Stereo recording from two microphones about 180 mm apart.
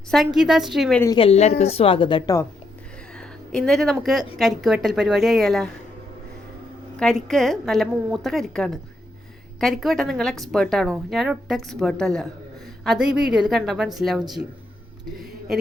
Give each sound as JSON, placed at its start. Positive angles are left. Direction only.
{"t": 0.3, "sound": "a woman's voice", "side_deg": 0}
{"t": 1.1, "sound": "a woman's voice", "side_deg": 30}
{"t": 3.2, "sound": "a sound", "side_deg": 5}
{"t": 4.0, "sound": "a woman's voice", "side_deg": 0}
{"t": 7.0, "sound": "a woman's voice", "side_deg": 0}